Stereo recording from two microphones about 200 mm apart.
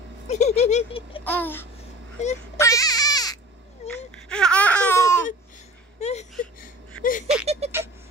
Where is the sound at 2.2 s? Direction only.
35° left (ahead or behind).